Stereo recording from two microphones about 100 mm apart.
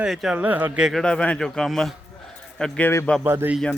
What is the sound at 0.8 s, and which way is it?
A man's voice, 5° left (ahead or behind).